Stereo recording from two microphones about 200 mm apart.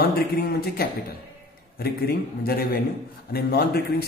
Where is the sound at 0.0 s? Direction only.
50° left (ahead or behind).